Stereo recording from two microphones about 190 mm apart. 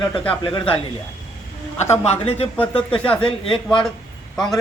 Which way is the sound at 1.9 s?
35° left (ahead or behind).